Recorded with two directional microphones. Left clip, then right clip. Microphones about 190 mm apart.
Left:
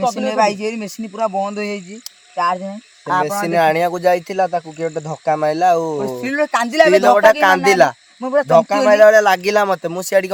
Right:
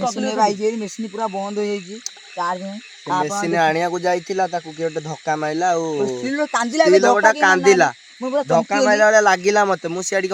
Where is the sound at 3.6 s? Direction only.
40° left (ahead or behind).